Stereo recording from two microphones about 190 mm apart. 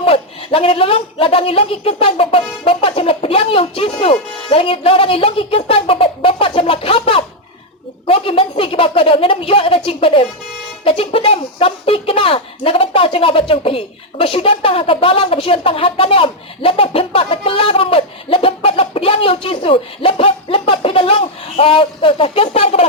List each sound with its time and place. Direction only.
0.0 s speech: 30° left (ahead or behind)